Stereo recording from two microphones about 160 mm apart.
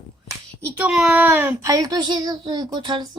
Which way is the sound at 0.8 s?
5° right (ahead or behind).